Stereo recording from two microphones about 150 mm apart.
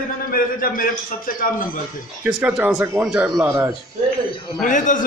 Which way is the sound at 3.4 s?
20° right (ahead or behind).